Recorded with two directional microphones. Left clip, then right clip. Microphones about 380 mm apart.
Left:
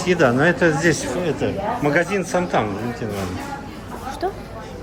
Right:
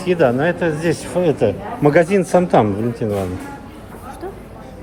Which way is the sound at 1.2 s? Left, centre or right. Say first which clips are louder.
Right 5 dB; centre.